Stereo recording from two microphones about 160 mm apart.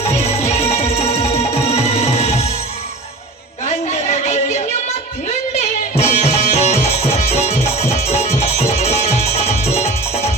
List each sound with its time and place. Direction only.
0.0 s music: 40° left (ahead or behind)
4.1 s a sound: 45° left (ahead or behind)
6.0 s music: 40° left (ahead or behind)